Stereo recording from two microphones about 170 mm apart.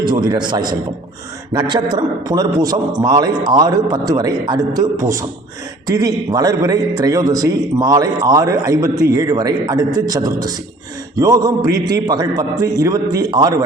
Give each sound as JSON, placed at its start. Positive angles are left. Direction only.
{"t": 0.0, "sound": "a man's voice", "side_deg": -25}